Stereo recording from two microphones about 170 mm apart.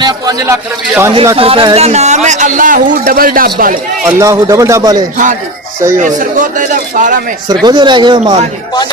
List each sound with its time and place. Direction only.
0.0 s a man's voice: 20° right (ahead or behind)
1.4 s a man's voice: 35° right (ahead or behind); by 3.8 s 55° right (ahead or behind)
4.0 s a man's voice: 20° right (ahead or behind)
6.0 s a man's voice: 45° right (ahead or behind)
7.4 s a man's voice: 25° right (ahead or behind)